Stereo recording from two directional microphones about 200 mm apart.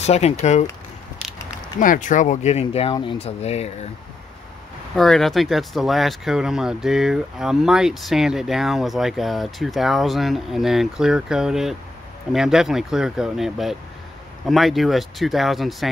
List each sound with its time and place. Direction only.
0.0 s speech: 35° left (ahead or behind)
1.8 s speech: 40° left (ahead or behind)
4.9 s speech: centre (ahead or behind)